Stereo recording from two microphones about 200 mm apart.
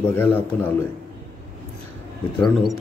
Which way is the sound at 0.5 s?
10° left (ahead or behind).